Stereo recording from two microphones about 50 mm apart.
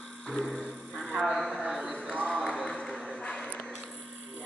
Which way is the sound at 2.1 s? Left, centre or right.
Centre.